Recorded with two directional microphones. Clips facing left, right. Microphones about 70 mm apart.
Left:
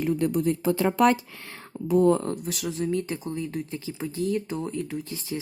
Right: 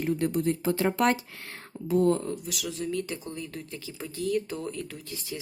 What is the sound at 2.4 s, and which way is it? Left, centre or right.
Speech, left.